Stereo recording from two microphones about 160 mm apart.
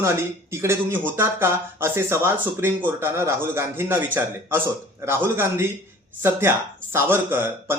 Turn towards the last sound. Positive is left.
turn(degrees=-15)  # may be behind; listen again after turning